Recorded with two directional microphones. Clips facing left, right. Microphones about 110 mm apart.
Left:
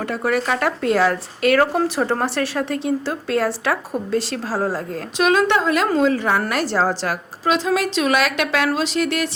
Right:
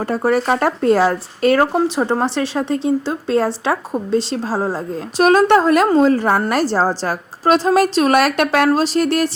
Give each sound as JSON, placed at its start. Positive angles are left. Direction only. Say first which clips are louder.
{"t": 0.0, "sound": "speech", "louder": "right 4 dB", "side_deg": -35}
{"t": 5.1, "sound": "a woman's voice", "louder": "right 5 dB", "side_deg": -40}